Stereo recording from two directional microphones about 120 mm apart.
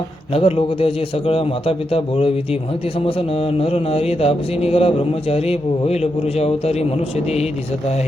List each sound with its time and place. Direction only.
0.3 s a man's voice: 55° left (ahead or behind)
3.2 s mantra: 50° left (ahead or behind)